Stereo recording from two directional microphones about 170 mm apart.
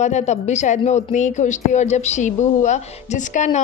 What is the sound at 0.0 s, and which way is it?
A woman's voice, 40° left (ahead or behind).